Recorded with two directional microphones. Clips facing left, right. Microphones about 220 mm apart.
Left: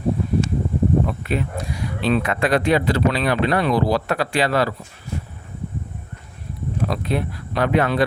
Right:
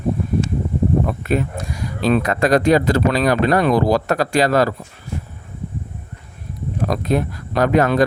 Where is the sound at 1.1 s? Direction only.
45° right (ahead or behind).